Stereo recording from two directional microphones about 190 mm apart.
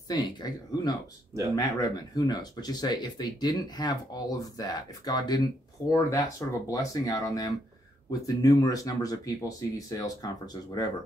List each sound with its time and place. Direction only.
0.1 s speech: 20° left (ahead or behind)